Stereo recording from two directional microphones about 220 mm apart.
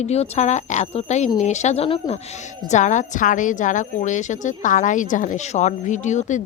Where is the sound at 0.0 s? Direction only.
30° left (ahead or behind).